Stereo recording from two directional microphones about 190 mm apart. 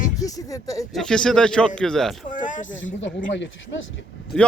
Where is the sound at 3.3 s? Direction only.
70° left (ahead or behind).